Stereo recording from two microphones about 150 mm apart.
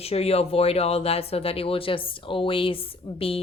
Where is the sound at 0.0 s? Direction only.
40° left (ahead or behind).